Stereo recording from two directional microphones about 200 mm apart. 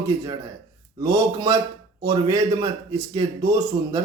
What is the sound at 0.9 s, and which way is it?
A man's voice, 20° right (ahead or behind).